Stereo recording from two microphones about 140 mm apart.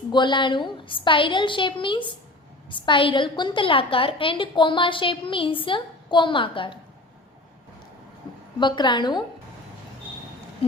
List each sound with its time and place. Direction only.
0.1 s a woman's voice: 35° left (ahead or behind)
8.5 s a woman's voice: 35° left (ahead or behind)